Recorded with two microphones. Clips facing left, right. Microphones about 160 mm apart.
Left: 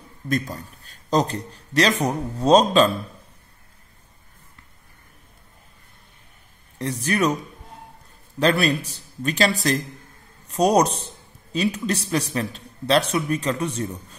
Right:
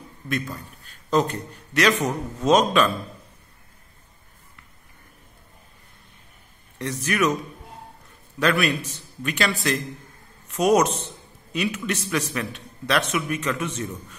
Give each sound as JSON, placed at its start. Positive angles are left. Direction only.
{"t": 0.3, "sound": "a man's voice", "side_deg": 35}
{"t": 6.8, "sound": "a man's voice", "side_deg": 35}
{"t": 8.4, "sound": "a man's voice", "side_deg": 30}